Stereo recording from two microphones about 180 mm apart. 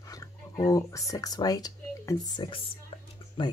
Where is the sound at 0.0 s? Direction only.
20° left (ahead or behind).